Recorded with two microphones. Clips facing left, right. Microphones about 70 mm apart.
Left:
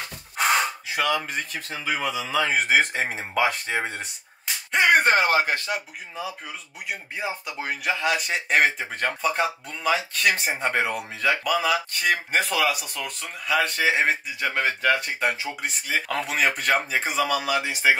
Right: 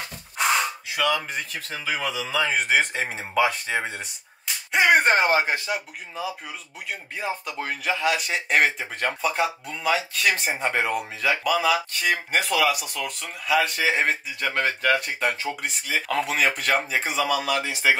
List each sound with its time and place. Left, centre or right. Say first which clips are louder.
1.0 s speech: right 1 dB; centre
1.7 s a man's voice: left 1 dB; left
2.5 s speech: left 2 dB; centre
5.0 s speech: even; right
5.7 s speech: even; centre